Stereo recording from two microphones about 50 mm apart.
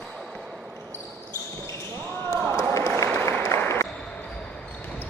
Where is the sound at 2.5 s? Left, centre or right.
Left.